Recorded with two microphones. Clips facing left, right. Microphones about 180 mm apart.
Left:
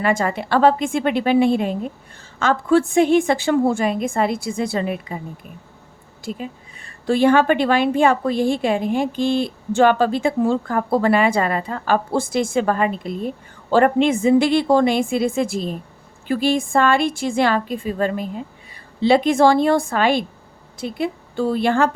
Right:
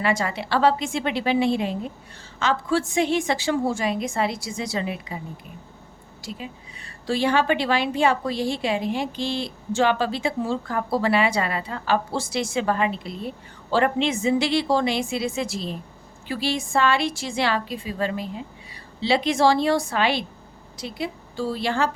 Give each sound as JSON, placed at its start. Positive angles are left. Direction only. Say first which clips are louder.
{"t": 0.0, "sound": "a woman's voice", "louder": "left 4 dB", "side_deg": 50}
{"t": 6.2, "sound": "a woman's voice", "louder": "left 6 dB", "side_deg": 50}